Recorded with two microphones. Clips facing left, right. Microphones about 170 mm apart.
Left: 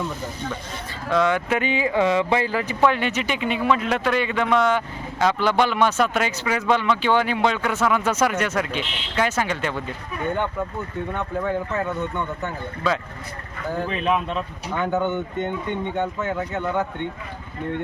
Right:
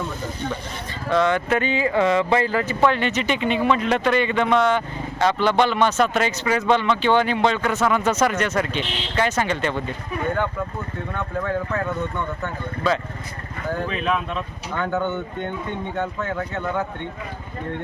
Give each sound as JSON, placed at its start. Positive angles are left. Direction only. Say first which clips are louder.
{"t": 1.1, "sound": "speech", "louder": "right 1 dB", "side_deg": 5}
{"t": 12.4, "sound": "speech", "louder": "right 1 dB", "side_deg": 0}
{"t": 14.8, "sound": "speech", "louder": "left 1 dB", "side_deg": 15}